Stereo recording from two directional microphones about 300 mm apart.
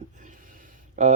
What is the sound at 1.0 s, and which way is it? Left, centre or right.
Speech, right.